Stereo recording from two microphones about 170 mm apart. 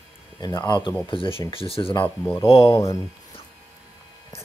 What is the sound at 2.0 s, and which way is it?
Speech, 10° left (ahead or behind).